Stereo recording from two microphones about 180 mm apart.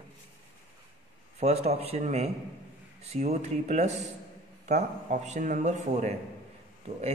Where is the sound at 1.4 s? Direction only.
35° right (ahead or behind).